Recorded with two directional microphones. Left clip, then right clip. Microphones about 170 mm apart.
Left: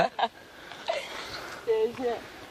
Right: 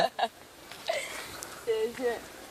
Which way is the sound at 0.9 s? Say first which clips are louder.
Left 1 dB; 5° left (ahead or behind).